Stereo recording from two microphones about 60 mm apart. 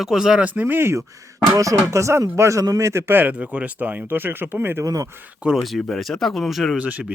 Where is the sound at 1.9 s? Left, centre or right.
Right.